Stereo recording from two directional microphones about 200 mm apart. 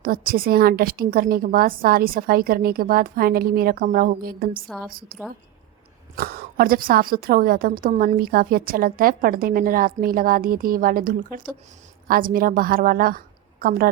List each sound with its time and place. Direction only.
0.0 s a woman's voice: 45° right (ahead or behind)
6.1 s a woman's voice: 50° right (ahead or behind)